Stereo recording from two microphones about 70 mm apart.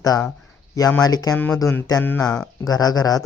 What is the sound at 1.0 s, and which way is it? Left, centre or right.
Speech, left.